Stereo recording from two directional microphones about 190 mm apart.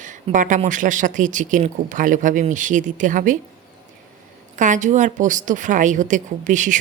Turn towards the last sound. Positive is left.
turn(degrees=-40)  # may be behind; listen again after turning